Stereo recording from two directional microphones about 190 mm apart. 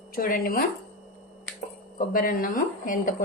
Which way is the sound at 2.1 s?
50° left (ahead or behind).